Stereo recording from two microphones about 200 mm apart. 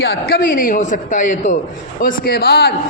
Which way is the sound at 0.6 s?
40° left (ahead or behind).